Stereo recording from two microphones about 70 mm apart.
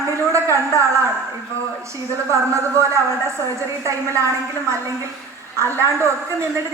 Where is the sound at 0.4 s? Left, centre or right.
Right.